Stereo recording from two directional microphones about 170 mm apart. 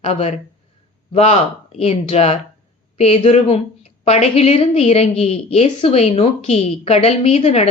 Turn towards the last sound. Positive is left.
turn(degrees=40)  # may be behind; listen again after turning